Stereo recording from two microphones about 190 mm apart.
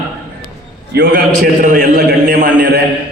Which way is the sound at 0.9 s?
60° right (ahead or behind).